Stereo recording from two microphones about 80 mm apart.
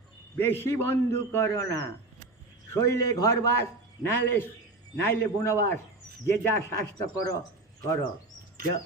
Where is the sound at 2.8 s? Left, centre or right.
Left.